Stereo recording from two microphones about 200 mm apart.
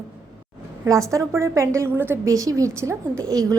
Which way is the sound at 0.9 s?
15° right (ahead or behind).